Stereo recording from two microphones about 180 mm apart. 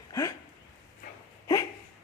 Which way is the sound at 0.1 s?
15° left (ahead or behind).